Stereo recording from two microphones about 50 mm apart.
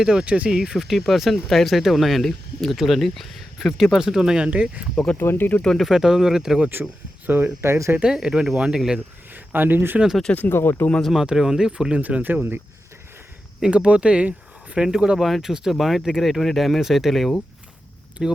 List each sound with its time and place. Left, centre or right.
0.0 s speech: centre
0.3 s speech: right
0.5 s speech: centre; by 4.9 s right
5.1 s speech: left
5.9 s speech: centre
7.3 s speech: right
7.6 s speech: right
8.0 s speech: centre
9.3 s speech: right
10.5 s speech: left
11.1 s speech: centre
12.0 s speech: right
13.6 s speech: right
14.8 s speech: centre